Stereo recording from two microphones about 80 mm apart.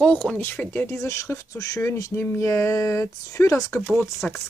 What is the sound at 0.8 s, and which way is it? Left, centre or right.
Speech, left.